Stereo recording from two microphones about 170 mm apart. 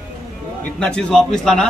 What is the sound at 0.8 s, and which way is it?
Speech, 5° left (ahead or behind).